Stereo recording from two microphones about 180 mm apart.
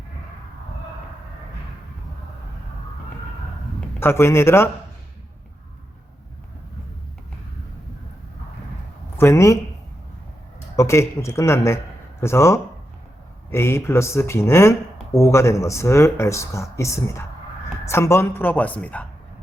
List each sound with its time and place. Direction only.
3.8 s a man's voice: 15° left (ahead or behind)
9.1 s speech: 15° left (ahead or behind)
10.8 s speech: 15° left (ahead or behind)